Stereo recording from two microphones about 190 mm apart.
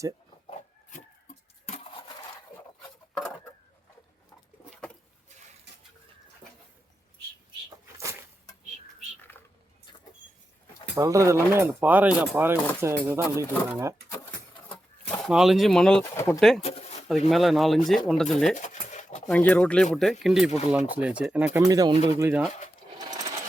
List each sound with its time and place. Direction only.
1.6 s a sound: 30° left (ahead or behind)
9.3 s squish: 10° left (ahead or behind)
10.9 s speech: 15° right (ahead or behind)
13.3 s speech: 15° left (ahead or behind)
13.7 s speech: 15° right (ahead or behind)
15.2 s speech: centre (ahead or behind); by 16.4 s 15° left (ahead or behind)
16.4 s speech: centre (ahead or behind)
16.6 s a sound: 35° left (ahead or behind)
17.1 s speech: centre (ahead or behind)
18.5 s a sound: 40° left (ahead or behind)
19.3 s speech: 10° left (ahead or behind); by 22.0 s 20° right (ahead or behind)
22.2 s speech: 10° right (ahead or behind)